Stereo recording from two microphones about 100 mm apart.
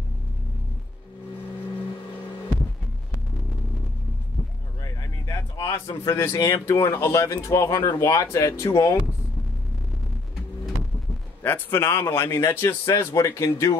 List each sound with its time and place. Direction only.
4.8 s a sound: 35° left (ahead or behind)
5.7 s speech: 30° left (ahead or behind)
11.4 s a man's voice: 20° left (ahead or behind)